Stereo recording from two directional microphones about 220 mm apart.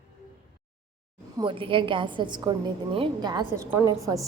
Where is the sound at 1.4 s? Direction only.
20° right (ahead or behind).